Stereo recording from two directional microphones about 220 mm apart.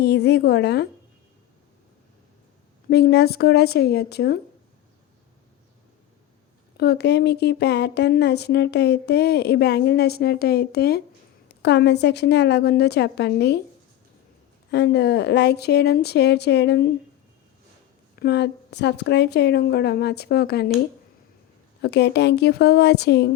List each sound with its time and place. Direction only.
0.0 s speech: 50° left (ahead or behind)
2.9 s speech: 45° left (ahead or behind)
6.7 s speech: 50° left (ahead or behind)
14.7 s speech: 50° left (ahead or behind)
18.2 s speech: 50° left (ahead or behind)
21.8 s speech: 50° left (ahead or behind)